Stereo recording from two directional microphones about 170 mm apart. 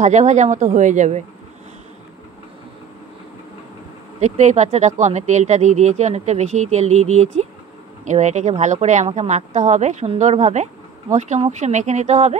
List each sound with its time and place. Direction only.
0.0 s speech: 45° right (ahead or behind)
4.2 s speech: 45° right (ahead or behind)